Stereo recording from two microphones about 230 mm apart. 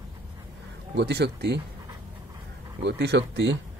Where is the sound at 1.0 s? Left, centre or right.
Right.